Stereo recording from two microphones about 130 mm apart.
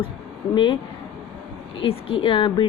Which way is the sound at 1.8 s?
45° left (ahead or behind).